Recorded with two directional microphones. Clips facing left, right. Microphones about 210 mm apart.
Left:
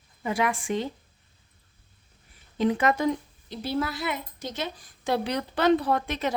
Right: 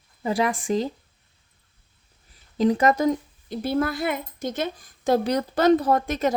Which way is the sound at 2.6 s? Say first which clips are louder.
Right 4 dB; 40° right (ahead or behind).